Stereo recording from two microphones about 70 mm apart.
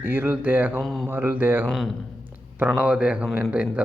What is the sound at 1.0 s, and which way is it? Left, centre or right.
Speech, right.